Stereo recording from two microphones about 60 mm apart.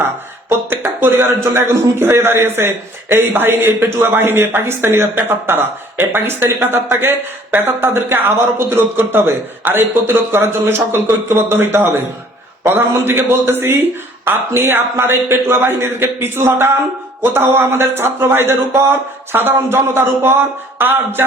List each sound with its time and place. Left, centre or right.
0.7 s a sound: right
1.5 s a man's voice: right
18.9 s a man's voice: right